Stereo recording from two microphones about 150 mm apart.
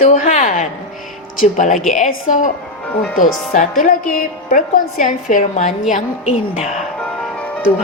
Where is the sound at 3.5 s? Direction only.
60° left (ahead or behind).